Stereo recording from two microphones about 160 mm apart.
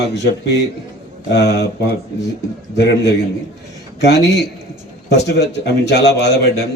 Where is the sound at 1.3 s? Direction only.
90° left.